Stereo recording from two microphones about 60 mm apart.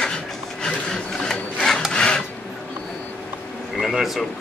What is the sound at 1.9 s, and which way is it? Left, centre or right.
Filing, centre.